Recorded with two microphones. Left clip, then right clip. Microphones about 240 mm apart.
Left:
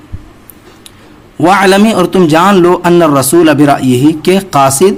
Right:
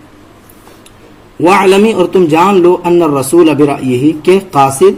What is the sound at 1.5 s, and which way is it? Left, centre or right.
A man's voice, left.